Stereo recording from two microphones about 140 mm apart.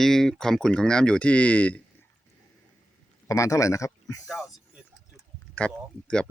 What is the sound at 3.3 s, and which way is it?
Speech, 25° left (ahead or behind).